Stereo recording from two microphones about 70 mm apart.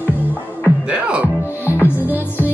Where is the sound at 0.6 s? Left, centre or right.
Centre.